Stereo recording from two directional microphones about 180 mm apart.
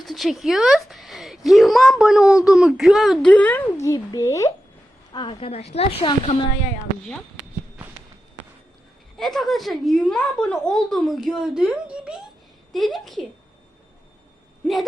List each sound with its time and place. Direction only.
0.0 s speech: centre (ahead or behind); by 4.5 s 15° left (ahead or behind)
5.1 s a woman's voice: 30° left (ahead or behind)
9.1 s speech: centre (ahead or behind)